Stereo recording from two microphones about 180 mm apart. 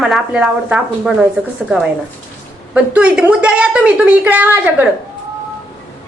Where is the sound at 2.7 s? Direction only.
5° right (ahead or behind).